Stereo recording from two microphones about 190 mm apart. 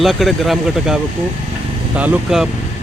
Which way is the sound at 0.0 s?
Centre (ahead or behind).